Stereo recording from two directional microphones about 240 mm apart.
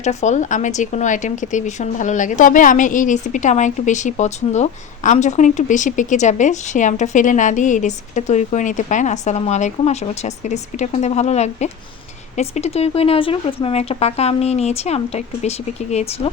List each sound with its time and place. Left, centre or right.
0.0 s speech: left